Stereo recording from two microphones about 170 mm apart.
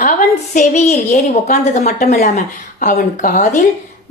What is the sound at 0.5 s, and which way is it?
A woman's voice, 40° left (ahead or behind).